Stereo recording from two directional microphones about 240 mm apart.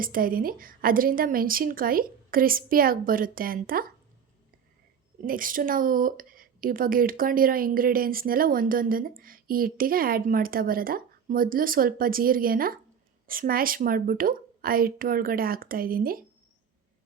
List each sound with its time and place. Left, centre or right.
0.0 s a woman's voice: right
5.2 s a woman's voice: right